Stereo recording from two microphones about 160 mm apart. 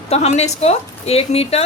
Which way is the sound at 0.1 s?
40° left (ahead or behind).